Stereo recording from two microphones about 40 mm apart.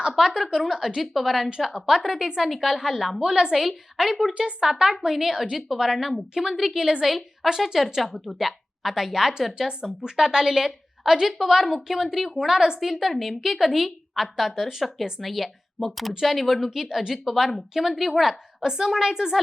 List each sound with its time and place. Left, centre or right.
0.3 s a woman's voice: centre
1.5 s a woman's voice: centre
3.2 s a woman's voice: right
3.6 s a woman's voice: centre
4.4 s a woman's voice: right
4.7 s a woman's voice: centre
12.8 s a woman's voice: centre